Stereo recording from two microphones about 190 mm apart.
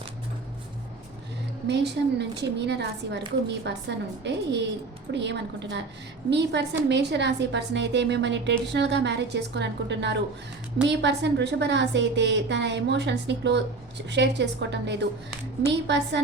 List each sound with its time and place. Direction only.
1.6 s a woman's voice: 60° right (ahead or behind)